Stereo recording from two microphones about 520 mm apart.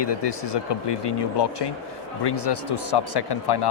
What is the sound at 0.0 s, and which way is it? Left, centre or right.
Speech, left.